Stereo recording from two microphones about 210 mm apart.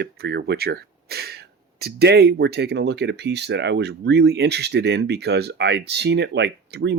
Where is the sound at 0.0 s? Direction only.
50° right (ahead or behind).